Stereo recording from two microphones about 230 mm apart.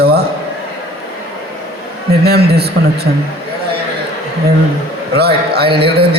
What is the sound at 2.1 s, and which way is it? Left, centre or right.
Speech, right.